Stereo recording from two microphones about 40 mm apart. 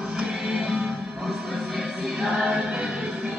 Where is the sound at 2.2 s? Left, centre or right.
Centre.